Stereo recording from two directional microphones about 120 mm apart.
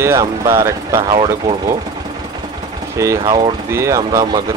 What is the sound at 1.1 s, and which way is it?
Speech, 40° right (ahead or behind).